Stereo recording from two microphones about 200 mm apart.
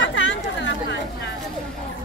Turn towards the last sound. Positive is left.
turn(degrees=65)  # may be behind; listen again after turning